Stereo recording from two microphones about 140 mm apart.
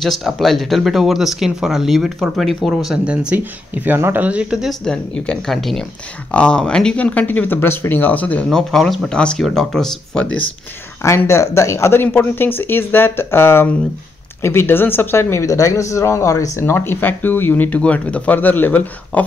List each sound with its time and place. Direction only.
0.0 s speech: centre (ahead or behind)
11.0 s speech: 20° left (ahead or behind)